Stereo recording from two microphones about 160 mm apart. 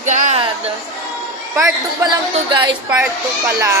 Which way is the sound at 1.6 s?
20° right (ahead or behind).